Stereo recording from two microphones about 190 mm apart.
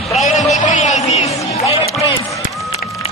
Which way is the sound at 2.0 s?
25° left (ahead or behind).